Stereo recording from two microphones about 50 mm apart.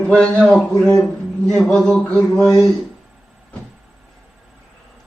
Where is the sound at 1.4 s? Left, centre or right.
Centre.